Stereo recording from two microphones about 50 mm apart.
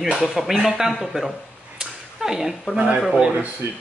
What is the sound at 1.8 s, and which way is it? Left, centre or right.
Slap, centre.